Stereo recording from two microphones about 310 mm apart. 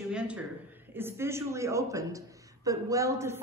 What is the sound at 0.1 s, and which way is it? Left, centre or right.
A man's voice, centre.